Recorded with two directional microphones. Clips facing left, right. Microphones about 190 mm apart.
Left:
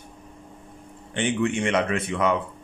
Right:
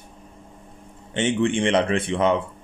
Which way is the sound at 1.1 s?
25° right (ahead or behind).